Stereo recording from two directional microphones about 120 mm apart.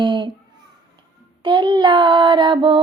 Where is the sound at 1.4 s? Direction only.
40° right (ahead or behind).